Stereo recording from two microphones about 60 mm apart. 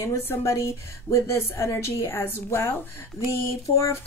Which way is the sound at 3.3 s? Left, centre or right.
Left.